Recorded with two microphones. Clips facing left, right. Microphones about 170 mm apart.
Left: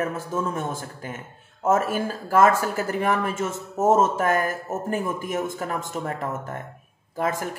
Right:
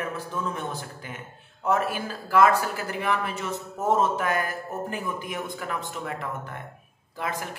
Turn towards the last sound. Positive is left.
turn(degrees=45)  # may be behind; listen again after turning